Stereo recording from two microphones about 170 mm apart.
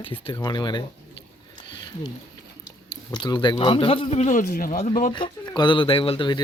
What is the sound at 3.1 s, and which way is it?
Speech, 25° left (ahead or behind).